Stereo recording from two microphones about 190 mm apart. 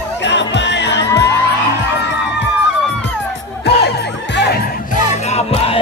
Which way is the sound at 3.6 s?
60° left (ahead or behind).